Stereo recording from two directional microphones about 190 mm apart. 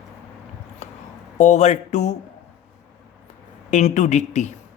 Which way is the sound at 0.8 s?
35° left (ahead or behind).